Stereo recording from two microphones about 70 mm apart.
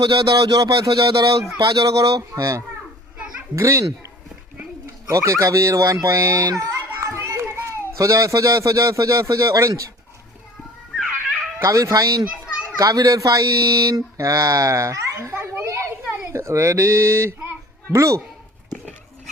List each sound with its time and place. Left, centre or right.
0.0 s speech: right
7.2 s children playing: right
7.9 s speech: right
11.6 s speech: right
12.2 s children playing: centre
12.7 s speech: right
15.3 s children playing: right
16.3 s speech: right